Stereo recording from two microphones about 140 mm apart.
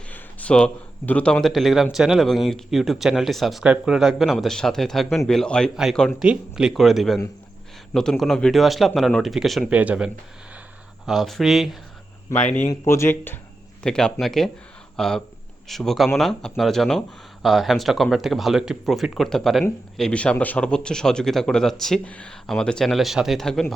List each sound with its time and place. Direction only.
0.1 s speech: 10° left (ahead or behind)
12.8 s speech: 20° left (ahead or behind)
13.8 s speech: 5° left (ahead or behind)